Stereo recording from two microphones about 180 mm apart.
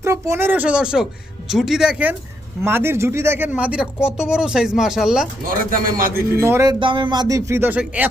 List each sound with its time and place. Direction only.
0.0 s speech: 15° right (ahead or behind)
5.5 s speech: 50° right (ahead or behind)
6.4 s speech: 15° right (ahead or behind)